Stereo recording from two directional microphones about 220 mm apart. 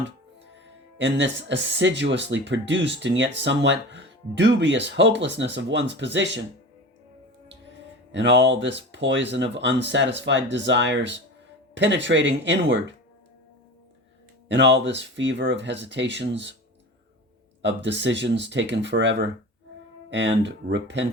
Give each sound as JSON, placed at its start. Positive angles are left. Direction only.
{"t": 0.5, "sound": "speech", "side_deg": -55}
{"t": 8.1, "sound": "speech", "side_deg": -55}
{"t": 14.4, "sound": "speech", "side_deg": -55}
{"t": 17.6, "sound": "speech", "side_deg": -55}